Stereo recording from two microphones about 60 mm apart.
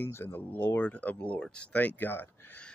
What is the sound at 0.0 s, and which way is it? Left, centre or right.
Speech, left.